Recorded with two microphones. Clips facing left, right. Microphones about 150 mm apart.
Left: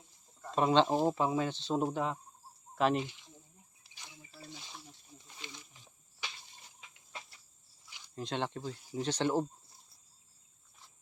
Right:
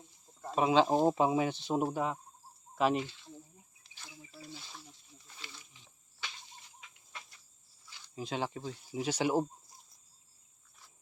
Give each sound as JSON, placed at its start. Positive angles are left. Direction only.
{"t": 0.5, "sound": "speech", "side_deg": -5}
{"t": 0.9, "sound": "speech", "side_deg": -20}
{"t": 3.0, "sound": "speech", "side_deg": 15}
{"t": 3.8, "sound": "a sound", "side_deg": 15}
{"t": 4.5, "sound": "wild animals", "side_deg": 15}
{"t": 7.9, "sound": "a sound", "side_deg": 15}
{"t": 8.1, "sound": "speech", "side_deg": -5}